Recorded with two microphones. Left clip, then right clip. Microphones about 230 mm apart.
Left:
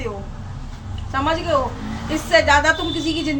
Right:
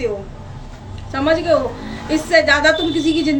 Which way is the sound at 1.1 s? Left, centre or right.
Centre.